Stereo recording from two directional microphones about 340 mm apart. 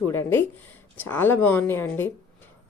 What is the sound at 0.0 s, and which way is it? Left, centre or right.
Speech, centre.